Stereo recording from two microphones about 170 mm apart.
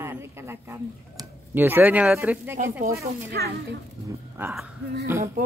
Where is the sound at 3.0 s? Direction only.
70° right (ahead or behind).